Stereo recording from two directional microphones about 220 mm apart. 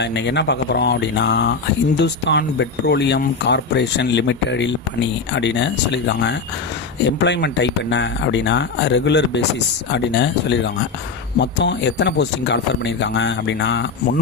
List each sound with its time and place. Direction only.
0.0 s speech: 50° left (ahead or behind)